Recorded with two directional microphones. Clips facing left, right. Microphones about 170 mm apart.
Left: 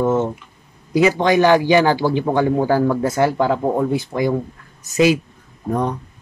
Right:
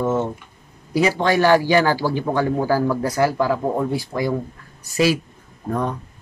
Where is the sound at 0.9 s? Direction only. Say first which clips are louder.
Left 3 dB; 20° left (ahead or behind).